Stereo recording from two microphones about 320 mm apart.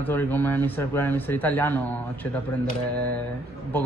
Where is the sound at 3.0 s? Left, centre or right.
Centre.